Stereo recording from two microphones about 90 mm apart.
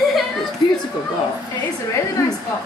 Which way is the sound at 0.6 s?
60° left (ahead or behind).